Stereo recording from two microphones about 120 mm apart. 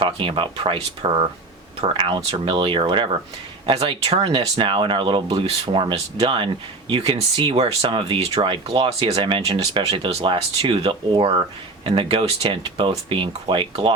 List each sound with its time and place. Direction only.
0.0 s speech: 45° right (ahead or behind)
4.2 s speech: 45° right (ahead or behind)
10.1 s speech: 60° right (ahead or behind)